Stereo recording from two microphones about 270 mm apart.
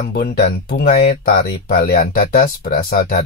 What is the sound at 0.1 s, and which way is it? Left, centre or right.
Speech, left.